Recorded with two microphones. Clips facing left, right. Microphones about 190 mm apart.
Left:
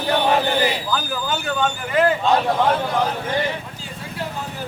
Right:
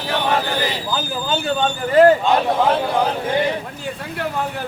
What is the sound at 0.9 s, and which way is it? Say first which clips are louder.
A man's voice: right 1 dB; 25° right (ahead or behind).